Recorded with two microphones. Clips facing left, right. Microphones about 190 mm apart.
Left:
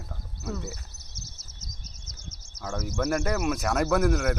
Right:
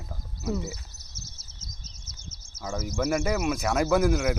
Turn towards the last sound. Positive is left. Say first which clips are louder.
# right 1 dB
turn(degrees=0)  # may be behind; listen again after turning